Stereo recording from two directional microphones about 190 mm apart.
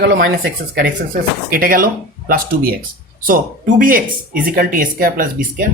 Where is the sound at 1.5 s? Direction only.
50° right (ahead or behind).